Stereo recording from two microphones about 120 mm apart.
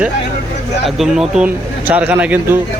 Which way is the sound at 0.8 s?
5° right (ahead or behind).